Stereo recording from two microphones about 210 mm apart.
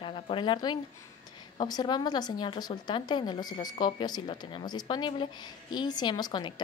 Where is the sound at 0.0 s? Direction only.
25° left (ahead or behind).